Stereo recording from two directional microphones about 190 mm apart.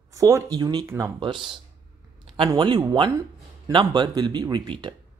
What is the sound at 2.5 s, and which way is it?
Speech, 25° right (ahead or behind).